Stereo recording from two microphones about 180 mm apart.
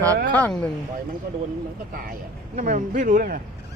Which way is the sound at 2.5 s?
45° right (ahead or behind).